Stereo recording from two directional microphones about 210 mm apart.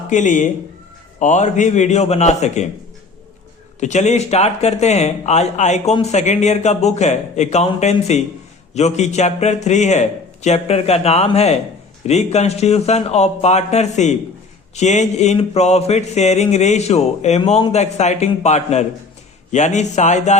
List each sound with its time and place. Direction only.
0.1 s speech: 35° left (ahead or behind)
3.8 s speech: 35° left (ahead or behind)